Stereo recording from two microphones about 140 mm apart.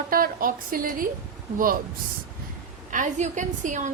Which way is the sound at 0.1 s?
90° right.